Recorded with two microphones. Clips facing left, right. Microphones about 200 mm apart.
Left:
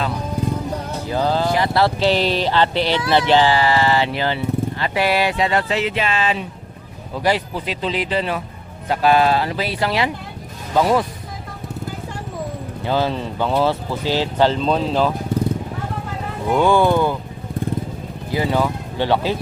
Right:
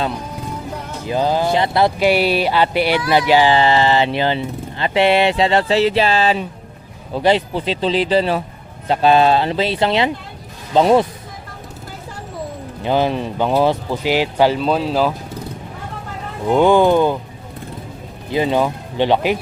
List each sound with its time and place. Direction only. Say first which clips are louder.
1.0 s speech: right 2 dB; 15° right (ahead or behind)
12.8 s speech: right 3 dB; 15° right (ahead or behind)
16.5 s speech: right 3 dB; 20° right (ahead or behind)
18.3 s speech: right 3 dB; 20° right (ahead or behind)